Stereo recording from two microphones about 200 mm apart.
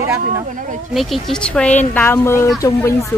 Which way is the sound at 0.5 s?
40° right (ahead or behind).